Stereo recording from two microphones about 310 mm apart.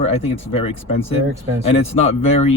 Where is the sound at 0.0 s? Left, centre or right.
Centre.